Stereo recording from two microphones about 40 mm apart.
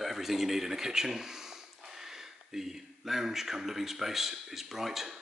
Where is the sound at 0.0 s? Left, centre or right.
Centre.